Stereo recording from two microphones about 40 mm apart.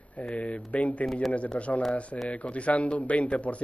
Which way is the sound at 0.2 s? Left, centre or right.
Left.